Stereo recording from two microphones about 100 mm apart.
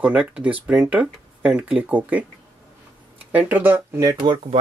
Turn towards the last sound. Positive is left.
turn(degrees=-50)  # may be behind; listen again after turning